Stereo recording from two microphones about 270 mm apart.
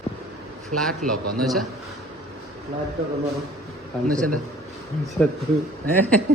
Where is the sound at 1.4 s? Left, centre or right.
Centre.